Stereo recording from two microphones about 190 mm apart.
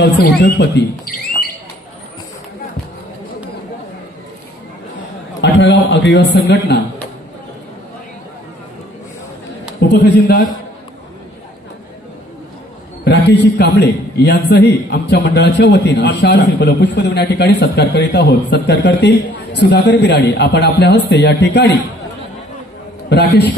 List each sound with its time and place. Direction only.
0.0 s speech: 60° left (ahead or behind)
5.4 s a man's voice: 70° left (ahead or behind)
9.8 s a man's voice: 60° left (ahead or behind)
13.0 s a man's voice: 65° left (ahead or behind)
23.0 s a man's voice: 60° left (ahead or behind)